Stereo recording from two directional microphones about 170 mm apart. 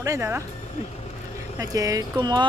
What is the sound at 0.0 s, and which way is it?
Speech, 15° right (ahead or behind).